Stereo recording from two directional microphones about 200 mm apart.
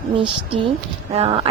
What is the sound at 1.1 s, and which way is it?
Speech, 30° right (ahead or behind).